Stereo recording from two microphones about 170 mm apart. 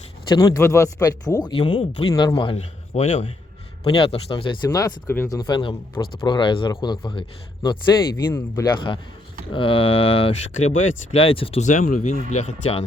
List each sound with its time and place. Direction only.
0.3 s speech: 20° left (ahead or behind)
4.7 s speech: 20° left (ahead or behind)
5.4 s speech: 25° left (ahead or behind)
8.1 s speech: 15° left (ahead or behind); by 11.6 s 35° left (ahead or behind)
11.6 s speech: 50° left (ahead or behind)